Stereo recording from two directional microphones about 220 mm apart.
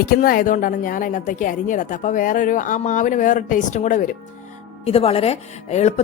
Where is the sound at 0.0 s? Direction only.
40° left (ahead or behind).